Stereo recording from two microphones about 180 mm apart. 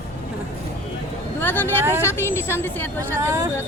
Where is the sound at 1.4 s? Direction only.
10° left (ahead or behind).